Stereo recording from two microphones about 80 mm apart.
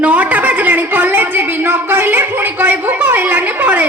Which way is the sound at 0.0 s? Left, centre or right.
Centre.